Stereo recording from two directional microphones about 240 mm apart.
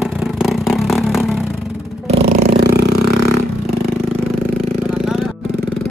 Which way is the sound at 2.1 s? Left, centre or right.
Right.